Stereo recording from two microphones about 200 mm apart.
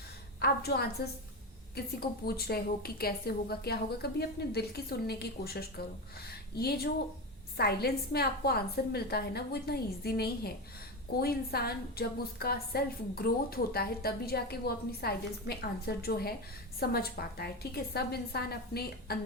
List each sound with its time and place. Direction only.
0.3 s a woman's voice: 55° left (ahead or behind)